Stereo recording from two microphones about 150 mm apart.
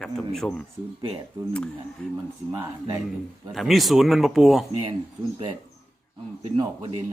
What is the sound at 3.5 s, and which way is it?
Speech, centre (ahead or behind).